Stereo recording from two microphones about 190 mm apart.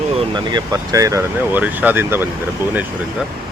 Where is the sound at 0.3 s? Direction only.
20° right (ahead or behind).